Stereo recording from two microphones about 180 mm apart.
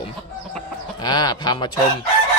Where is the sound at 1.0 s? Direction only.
20° left (ahead or behind).